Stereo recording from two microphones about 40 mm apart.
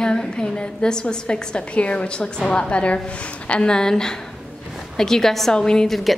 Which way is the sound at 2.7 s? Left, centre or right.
Left.